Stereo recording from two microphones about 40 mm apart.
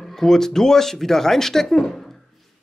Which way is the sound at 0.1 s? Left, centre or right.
Centre.